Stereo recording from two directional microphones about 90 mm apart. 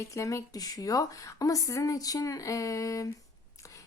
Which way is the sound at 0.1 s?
35° left (ahead or behind).